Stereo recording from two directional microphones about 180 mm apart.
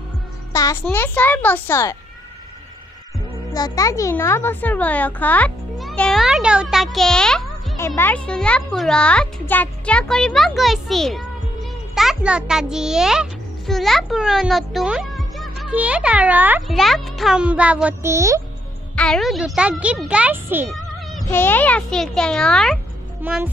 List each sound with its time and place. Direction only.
0.5 s music: 20° left (ahead or behind)
0.9 s a child's voice: 10° left (ahead or behind)
3.5 s a child's voice: 20° left (ahead or behind); by 7.4 s 5° left (ahead or behind)
7.7 s a child's voice: 15° left (ahead or behind); by 18.4 s 15° right (ahead or behind)
18.9 s a child's voice: 5° left (ahead or behind)
21.3 s a child's voice: 10° left (ahead or behind)
23.2 s music: 10° right (ahead or behind)